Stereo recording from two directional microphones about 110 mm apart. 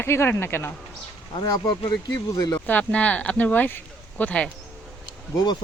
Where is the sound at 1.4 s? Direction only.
45° left (ahead or behind).